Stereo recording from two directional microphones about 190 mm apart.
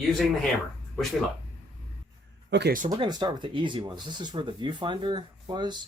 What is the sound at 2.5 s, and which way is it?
Speech, 60° right (ahead or behind).